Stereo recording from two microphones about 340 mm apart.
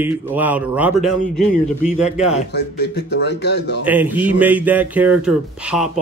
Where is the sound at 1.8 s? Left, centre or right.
Left.